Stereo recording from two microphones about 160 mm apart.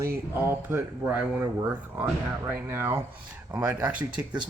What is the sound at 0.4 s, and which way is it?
Speech, 15° right (ahead or behind).